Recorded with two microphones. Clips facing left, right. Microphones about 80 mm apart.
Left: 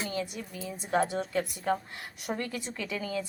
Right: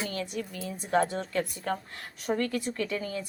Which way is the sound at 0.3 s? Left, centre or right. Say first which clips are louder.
Right 3 dB; centre.